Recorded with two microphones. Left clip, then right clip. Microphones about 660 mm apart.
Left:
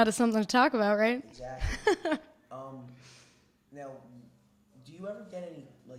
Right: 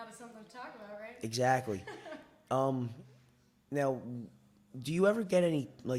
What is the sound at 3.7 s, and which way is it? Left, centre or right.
A man's voice, right.